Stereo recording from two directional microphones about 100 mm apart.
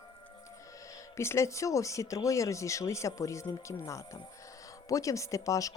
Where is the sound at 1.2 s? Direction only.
25° left (ahead or behind).